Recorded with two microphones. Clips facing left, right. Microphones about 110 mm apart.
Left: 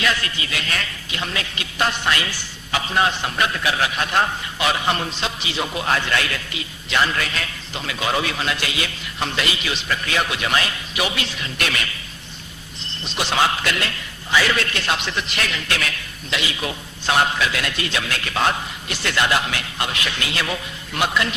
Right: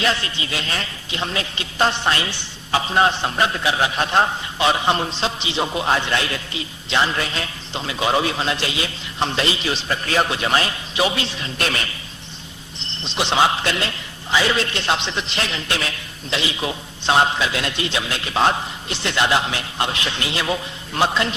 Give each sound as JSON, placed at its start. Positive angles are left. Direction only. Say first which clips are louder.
{"t": 0.0, "sound": "a man's voice", "louder": "right 1 dB", "side_deg": -30}